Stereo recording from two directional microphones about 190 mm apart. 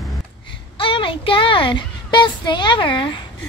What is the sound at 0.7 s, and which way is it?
A child's voice, 25° left (ahead or behind).